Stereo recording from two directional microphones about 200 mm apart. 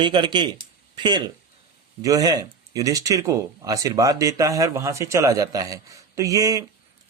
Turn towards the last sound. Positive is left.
turn(degrees=-15)  # may be behind; listen again after turning